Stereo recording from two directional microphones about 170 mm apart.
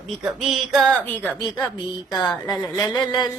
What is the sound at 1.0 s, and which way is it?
Mantra, 10° left (ahead or behind).